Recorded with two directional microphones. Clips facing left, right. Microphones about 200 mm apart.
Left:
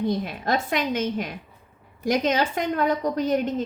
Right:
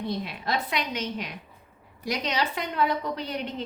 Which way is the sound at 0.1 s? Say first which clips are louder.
Left 5 dB; 50° left (ahead or behind).